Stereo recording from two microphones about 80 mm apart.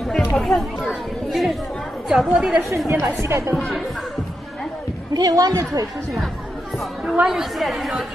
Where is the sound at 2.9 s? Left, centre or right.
Right.